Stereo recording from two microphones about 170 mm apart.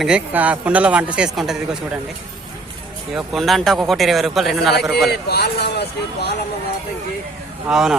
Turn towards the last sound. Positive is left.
turn(degrees=-5)  # may be behind; listen again after turning